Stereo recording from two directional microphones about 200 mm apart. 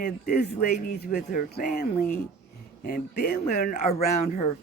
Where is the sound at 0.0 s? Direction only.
50° left (ahead or behind).